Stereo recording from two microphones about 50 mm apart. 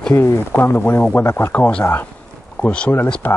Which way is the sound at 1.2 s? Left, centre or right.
Left.